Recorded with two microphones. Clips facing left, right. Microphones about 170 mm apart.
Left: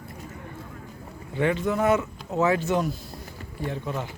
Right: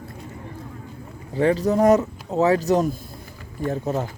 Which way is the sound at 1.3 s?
35° right (ahead or behind).